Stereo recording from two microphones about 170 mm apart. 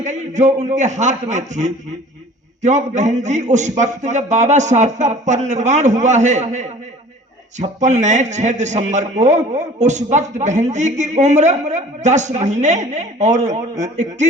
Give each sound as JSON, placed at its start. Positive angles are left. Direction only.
{"t": 0.0, "sound": "a man's voice", "side_deg": -45}